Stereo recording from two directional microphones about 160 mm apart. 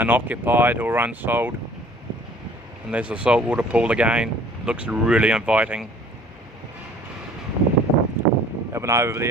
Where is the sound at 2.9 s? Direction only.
10° right (ahead or behind).